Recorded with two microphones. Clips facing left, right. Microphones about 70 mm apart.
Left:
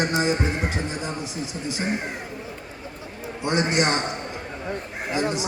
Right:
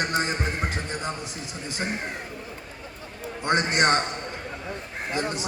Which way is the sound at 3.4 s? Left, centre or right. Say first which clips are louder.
Even; right.